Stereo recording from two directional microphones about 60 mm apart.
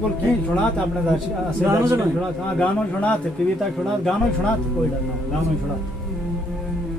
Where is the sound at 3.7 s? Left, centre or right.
Centre.